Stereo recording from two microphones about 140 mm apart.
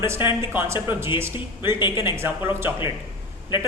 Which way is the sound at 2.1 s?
20° right (ahead or behind).